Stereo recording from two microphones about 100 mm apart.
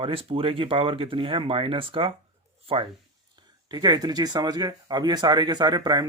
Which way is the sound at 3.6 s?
45° right (ahead or behind).